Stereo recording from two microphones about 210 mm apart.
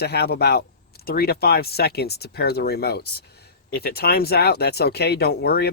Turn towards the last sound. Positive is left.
turn(degrees=50)  # may be behind; listen again after turning